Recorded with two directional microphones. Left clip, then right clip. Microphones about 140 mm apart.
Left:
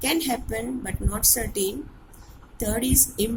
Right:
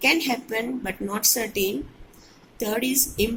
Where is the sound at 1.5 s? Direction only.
65° left (ahead or behind).